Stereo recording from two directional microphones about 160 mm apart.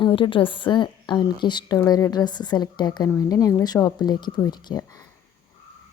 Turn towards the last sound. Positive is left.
turn(degrees=25)  # may be behind; listen again after turning